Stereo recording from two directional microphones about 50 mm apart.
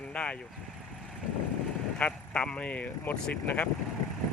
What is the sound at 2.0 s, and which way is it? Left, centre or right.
Speech, left.